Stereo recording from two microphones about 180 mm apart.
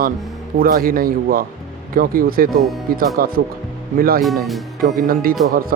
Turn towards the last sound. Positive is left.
turn(degrees=-55)  # may be behind; listen again after turning